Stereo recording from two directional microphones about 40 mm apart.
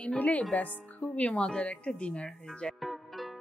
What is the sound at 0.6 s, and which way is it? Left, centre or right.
A woman's voice, left.